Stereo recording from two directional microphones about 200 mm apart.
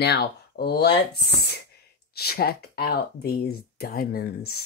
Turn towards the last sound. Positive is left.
turn(degrees=45)  # may be behind; listen again after turning